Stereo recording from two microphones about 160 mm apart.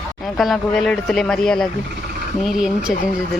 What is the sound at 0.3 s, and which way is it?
Speech, centre (ahead or behind).